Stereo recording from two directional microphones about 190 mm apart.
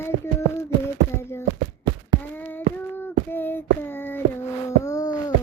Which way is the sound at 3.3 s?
10° left (ahead or behind).